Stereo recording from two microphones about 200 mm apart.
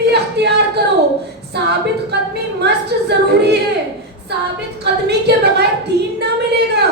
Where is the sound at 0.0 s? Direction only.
55° right (ahead or behind).